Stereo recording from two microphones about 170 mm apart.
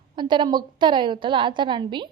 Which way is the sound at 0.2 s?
25° right (ahead or behind).